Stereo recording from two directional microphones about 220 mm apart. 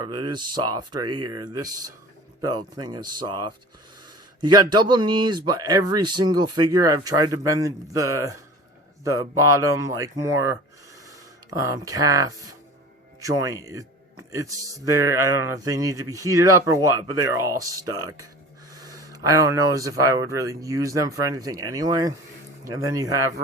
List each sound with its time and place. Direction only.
0.0 s speech: 20° right (ahead or behind)
11.6 s speech: 15° right (ahead or behind)